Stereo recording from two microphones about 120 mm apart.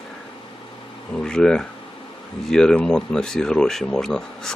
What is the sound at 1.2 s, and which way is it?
Speech, 5° left (ahead or behind).